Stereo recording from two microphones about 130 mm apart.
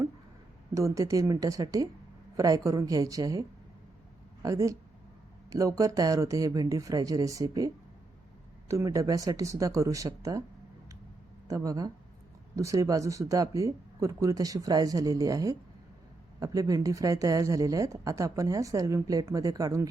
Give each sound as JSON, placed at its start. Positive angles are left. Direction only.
{"t": 0.7, "sound": "a woman's voice", "side_deg": -25}
{"t": 4.4, "sound": "a woman's voice", "side_deg": -25}
{"t": 11.4, "sound": "a woman's voice", "side_deg": -25}